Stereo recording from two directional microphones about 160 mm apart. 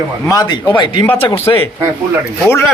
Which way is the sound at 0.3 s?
25° left (ahead or behind).